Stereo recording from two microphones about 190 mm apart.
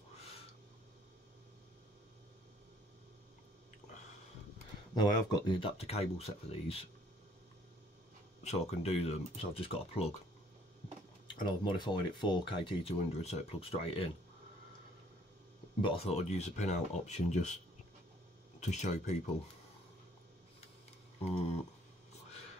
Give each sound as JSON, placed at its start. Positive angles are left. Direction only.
{"t": 0.2, "sound": "a sound", "side_deg": 30}
{"t": 5.5, "sound": "speech", "side_deg": 30}
{"t": 8.5, "sound": "speech", "side_deg": 35}
{"t": 11.2, "sound": "speech", "side_deg": 25}
{"t": 15.8, "sound": "speech", "side_deg": 30}
{"t": 18.6, "sound": "speech", "side_deg": 35}
{"t": 21.2, "sound": "speech", "side_deg": 35}